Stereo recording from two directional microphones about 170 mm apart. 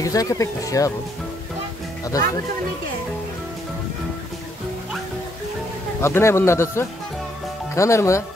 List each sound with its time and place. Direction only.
0.0 s speech: 20° left (ahead or behind)
5.9 s speech: 15° left (ahead or behind)